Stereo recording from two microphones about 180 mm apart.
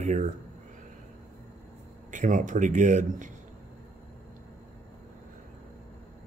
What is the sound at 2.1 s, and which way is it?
Speech, 45° right (ahead or behind).